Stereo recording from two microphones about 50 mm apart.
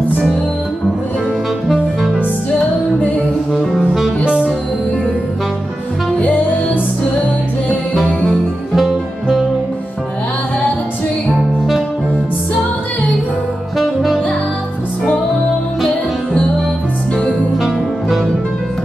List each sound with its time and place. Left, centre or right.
1.7 s music: centre
3.0 s music: left
6.1 s music: left
8.0 s music: left
8.3 s music: centre
11.2 s music: centre
13.7 s saxophone: centre